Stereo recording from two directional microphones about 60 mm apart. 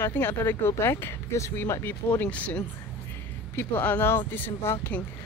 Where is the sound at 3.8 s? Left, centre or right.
Left.